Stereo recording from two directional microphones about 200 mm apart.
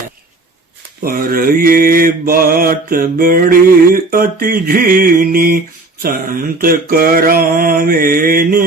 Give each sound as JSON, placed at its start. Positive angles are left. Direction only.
{"t": 1.0, "sound": "mantra", "side_deg": -45}